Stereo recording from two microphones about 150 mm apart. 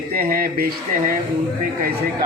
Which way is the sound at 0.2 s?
80° right.